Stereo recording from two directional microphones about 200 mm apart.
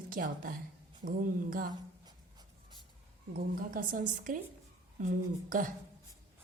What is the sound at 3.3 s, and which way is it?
A woman's voice, 45° right (ahead or behind).